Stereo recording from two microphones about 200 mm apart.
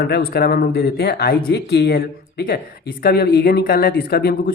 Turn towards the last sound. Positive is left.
turn(degrees=50)  # may be behind; listen again after turning